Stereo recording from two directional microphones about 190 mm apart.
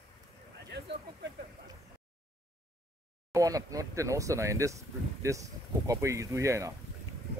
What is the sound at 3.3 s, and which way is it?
Speech, 20° right (ahead or behind).